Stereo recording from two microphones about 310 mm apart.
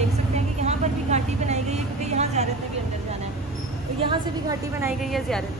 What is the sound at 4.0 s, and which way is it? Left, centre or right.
A woman's voice, centre.